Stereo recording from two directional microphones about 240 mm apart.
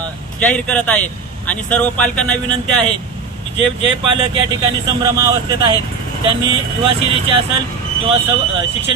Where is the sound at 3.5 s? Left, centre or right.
Right.